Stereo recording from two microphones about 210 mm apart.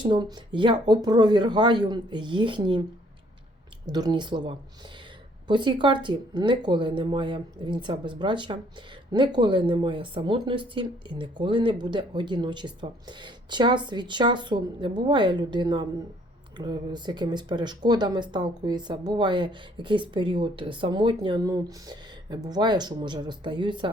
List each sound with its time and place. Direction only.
0.0 s speech: 20° right (ahead or behind)
3.8 s speech: 20° right (ahead or behind)